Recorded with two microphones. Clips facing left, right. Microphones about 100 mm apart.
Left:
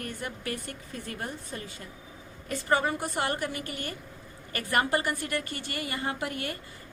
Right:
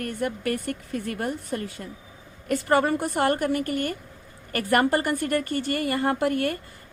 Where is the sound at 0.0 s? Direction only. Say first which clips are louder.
Right 8 dB; 55° right (ahead or behind).